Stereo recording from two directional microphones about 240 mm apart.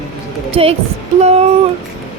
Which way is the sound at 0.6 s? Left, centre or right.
Right.